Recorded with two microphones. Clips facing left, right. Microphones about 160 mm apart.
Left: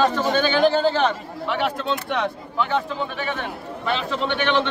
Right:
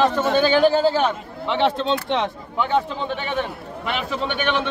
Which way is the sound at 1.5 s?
25° right (ahead or behind).